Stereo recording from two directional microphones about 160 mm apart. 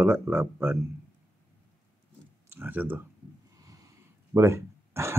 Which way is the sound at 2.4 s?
10° right (ahead or behind).